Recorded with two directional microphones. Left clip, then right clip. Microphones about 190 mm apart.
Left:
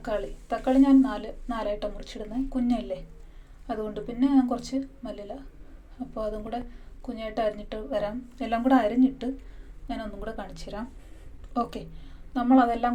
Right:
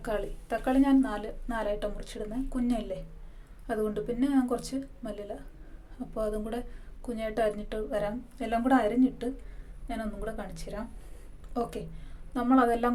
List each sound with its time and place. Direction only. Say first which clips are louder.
0.0 s a woman's voice: left 2 dB; 15° right (ahead or behind)
12.3 s a woman's voice: left 3 dB; 15° right (ahead or behind)